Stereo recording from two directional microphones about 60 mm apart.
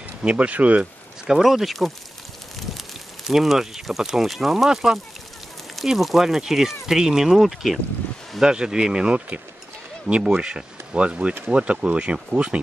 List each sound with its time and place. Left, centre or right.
0.2 s speech: right
1.3 s speech: centre
8.4 s speech: centre